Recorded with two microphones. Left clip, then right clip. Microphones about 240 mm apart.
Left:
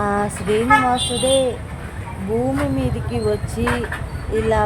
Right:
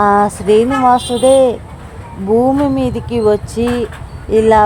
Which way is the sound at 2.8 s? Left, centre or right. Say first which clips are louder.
Right 8 dB; right.